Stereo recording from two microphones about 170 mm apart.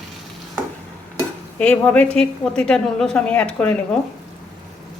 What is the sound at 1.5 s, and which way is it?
A woman's voice, 5° left (ahead or behind).